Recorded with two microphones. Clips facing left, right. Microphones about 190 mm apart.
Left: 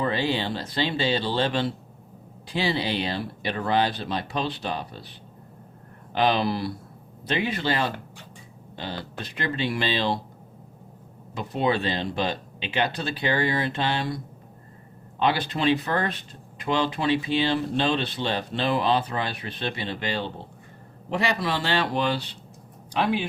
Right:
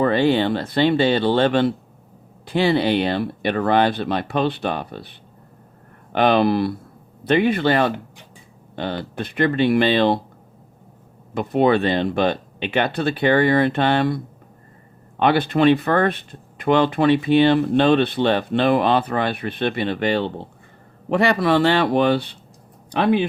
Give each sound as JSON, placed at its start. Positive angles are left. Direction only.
{"t": 0.0, "sound": "speech", "side_deg": -55}
{"t": 6.1, "sound": "speech", "side_deg": -60}
{"t": 11.3, "sound": "speech", "side_deg": -55}
{"t": 15.2, "sound": "speech", "side_deg": -55}